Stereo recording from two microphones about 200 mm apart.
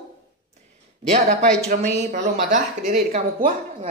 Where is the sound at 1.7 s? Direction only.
40° right (ahead or behind).